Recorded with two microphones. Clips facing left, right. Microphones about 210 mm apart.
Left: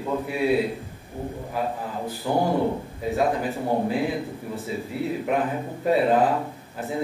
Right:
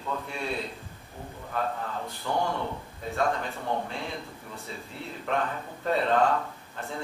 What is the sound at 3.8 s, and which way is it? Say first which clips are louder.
A man's voice: left 11 dB; 5° left (ahead or behind).